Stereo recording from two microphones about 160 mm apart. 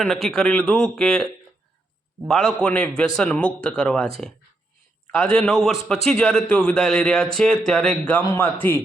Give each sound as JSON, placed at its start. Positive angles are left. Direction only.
{"t": 0.0, "sound": "speech", "side_deg": 0}
{"t": 5.1, "sound": "speech", "side_deg": 5}
{"t": 8.2, "sound": "a man's voice", "side_deg": 20}